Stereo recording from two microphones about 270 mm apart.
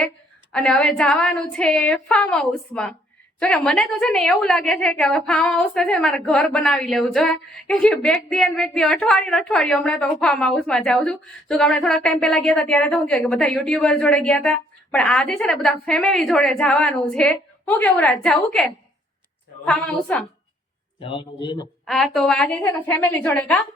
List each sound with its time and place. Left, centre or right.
0.5 s a woman's voice: centre
21.0 s a woman's voice: centre
21.8 s a woman's voice: centre